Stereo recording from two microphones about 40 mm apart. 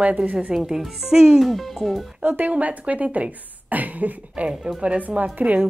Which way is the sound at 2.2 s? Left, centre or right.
Right.